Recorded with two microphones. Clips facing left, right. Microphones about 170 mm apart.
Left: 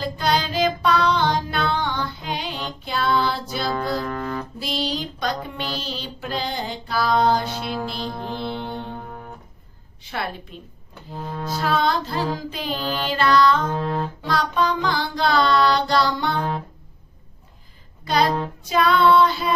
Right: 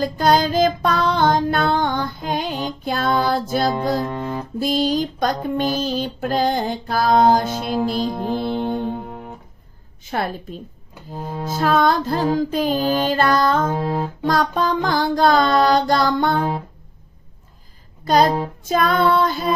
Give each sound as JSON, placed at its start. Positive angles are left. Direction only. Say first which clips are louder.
{"t": 0.0, "sound": "music", "louder": "right 6 dB", "side_deg": -45}
{"t": 4.0, "sound": "music", "louder": "right 2 dB", "side_deg": -25}
{"t": 4.6, "sound": "music", "louder": "right 11 dB", "side_deg": -45}
{"t": 10.0, "sound": "music", "louder": "right 5 dB", "side_deg": -45}
{"t": 13.7, "sound": "music", "louder": "right 2 dB", "side_deg": -10}
{"t": 14.2, "sound": "music", "louder": "right 3 dB", "side_deg": -45}
{"t": 18.0, "sound": "music", "louder": "right 4 dB", "side_deg": -45}